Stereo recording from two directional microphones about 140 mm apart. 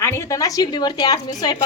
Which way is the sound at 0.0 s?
20° left (ahead or behind).